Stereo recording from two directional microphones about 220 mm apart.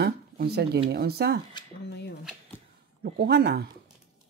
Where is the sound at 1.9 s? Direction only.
50° left (ahead or behind).